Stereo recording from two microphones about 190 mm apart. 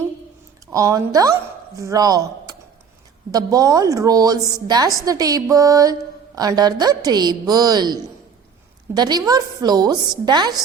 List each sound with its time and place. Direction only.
0.7 s speech: 15° right (ahead or behind)
3.3 s mantra: 20° right (ahead or behind)
9.0 s mantra: 20° right (ahead or behind)